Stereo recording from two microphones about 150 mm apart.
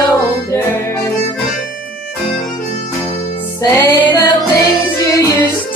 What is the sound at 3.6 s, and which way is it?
Music, 30° left (ahead or behind).